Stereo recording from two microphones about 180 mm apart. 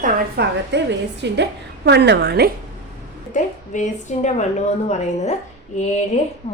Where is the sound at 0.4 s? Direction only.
65° right (ahead or behind).